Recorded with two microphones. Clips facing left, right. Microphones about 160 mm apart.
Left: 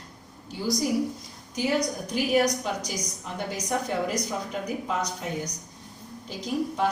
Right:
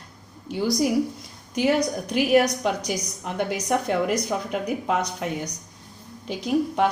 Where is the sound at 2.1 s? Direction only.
65° right (ahead or behind).